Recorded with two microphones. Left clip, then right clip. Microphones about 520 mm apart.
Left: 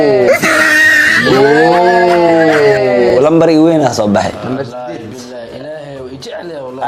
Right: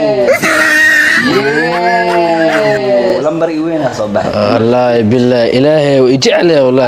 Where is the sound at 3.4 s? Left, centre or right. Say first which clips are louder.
Left 5 dB; left.